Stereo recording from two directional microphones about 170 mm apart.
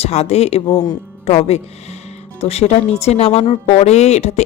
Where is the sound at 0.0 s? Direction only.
40° left (ahead or behind).